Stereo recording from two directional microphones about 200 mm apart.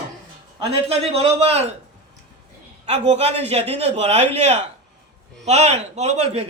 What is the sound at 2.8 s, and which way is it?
A man's voice, 35° right (ahead or behind).